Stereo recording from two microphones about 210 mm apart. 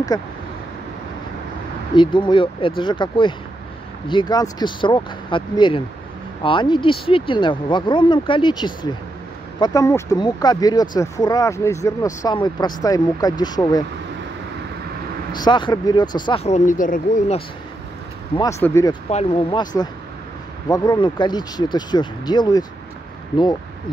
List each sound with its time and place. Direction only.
0.1 s speech: 20° left (ahead or behind)
2.0 s speech: 20° left (ahead or behind)
15.3 s speech: 20° left (ahead or behind); by 17.4 s 40° left (ahead or behind)
18.3 s speech: 15° left (ahead or behind)
19.0 s speech: 25° left (ahead or behind)